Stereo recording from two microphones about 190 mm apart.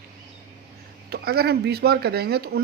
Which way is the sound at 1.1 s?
55° right (ahead or behind).